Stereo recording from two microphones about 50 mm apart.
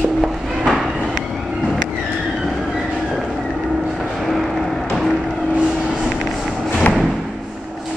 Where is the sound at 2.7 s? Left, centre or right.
Centre.